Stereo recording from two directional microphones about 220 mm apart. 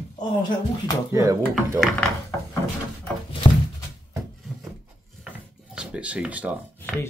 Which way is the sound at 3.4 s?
25° left (ahead or behind).